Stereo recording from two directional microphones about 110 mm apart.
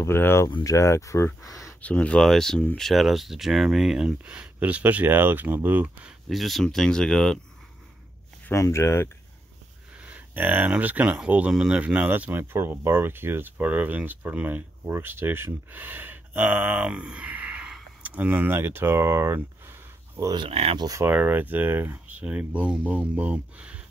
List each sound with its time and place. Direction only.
0.0 s speech: 20° left (ahead or behind)
1.4 s speech: centre (ahead or behind)
1.8 s speech: 10° left (ahead or behind); by 4.1 s 5° right (ahead or behind)
4.2 s speech: 15° right (ahead or behind)
6.2 s speech: centre (ahead or behind)
8.5 s speech: 25° left (ahead or behind)
9.9 s speech: 15° right (ahead or behind)
20.3 s speech: 60° right (ahead or behind)
20.8 s speech: 30° right (ahead or behind)
21.1 s speech: 15° right (ahead or behind)